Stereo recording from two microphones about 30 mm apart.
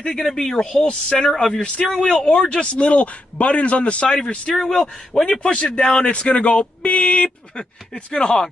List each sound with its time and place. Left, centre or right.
0.0 s a man's voice: centre
1.5 s speech: left
2.6 s a man's voice: left
4.6 s a man's voice: centre
5.4 s speech: left
5.8 s speech: left
6.0 s speech: left
6.8 s a sound: left
7.2 s speech: left